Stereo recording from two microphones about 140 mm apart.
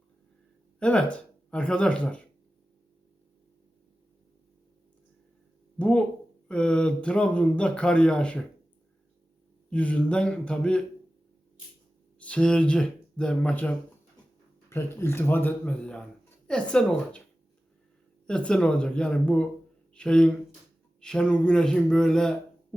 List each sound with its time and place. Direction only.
0.8 s speech: 10° left (ahead or behind)
5.8 s speech: 10° left (ahead or behind)
9.6 s speech: 10° left (ahead or behind)
12.2 s speech: 5° left (ahead or behind)
18.3 s a man's voice: 5° left (ahead or behind)